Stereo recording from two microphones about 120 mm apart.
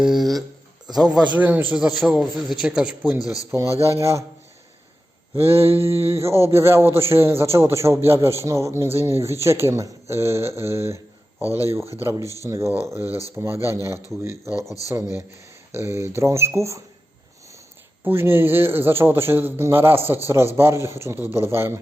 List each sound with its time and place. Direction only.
0.0 s a man's voice: centre (ahead or behind)
3.5 s a man's voice: 25° right (ahead or behind)
5.5 s mantra: 55° right (ahead or behind)
6.1 s a man's voice: 20° right (ahead or behind)
18.0 s a man's voice: 20° right (ahead or behind)